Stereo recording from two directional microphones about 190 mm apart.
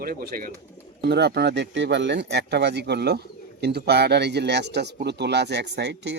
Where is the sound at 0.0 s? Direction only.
50° right (ahead or behind).